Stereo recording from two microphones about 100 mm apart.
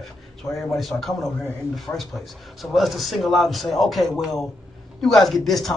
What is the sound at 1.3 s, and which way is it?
Speech, 20° left (ahead or behind).